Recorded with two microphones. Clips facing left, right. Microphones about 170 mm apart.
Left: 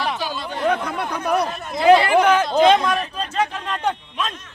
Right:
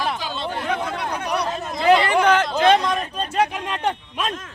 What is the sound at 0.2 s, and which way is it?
Chatter, 20° right (ahead or behind).